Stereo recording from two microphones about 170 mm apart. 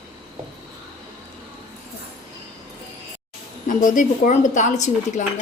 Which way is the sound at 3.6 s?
50° left (ahead or behind).